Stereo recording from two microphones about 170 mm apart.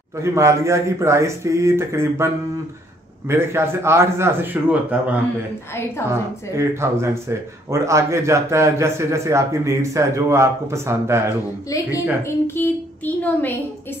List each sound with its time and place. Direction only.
0.2 s speech: 15° right (ahead or behind)
6.5 s speech: 15° right (ahead or behind)
12.4 s speech: 10° left (ahead or behind)